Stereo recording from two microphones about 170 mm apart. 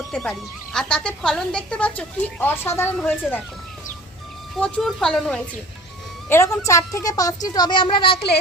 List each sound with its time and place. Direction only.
0.1 s speech: 5° left (ahead or behind)
3.0 s speech: 5° left (ahead or behind)
4.5 s speech: 5° left (ahead or behind)
6.2 s a woman's voice: 15° left (ahead or behind)